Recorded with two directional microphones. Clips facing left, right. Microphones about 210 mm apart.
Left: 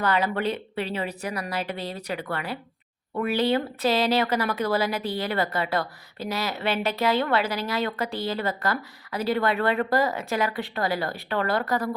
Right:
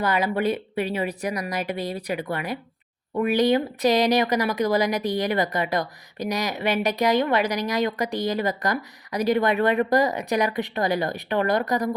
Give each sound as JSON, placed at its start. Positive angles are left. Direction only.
{"t": 0.0, "sound": "speech", "side_deg": -10}